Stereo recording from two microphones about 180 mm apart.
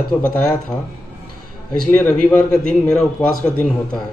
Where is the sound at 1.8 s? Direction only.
5° left (ahead or behind).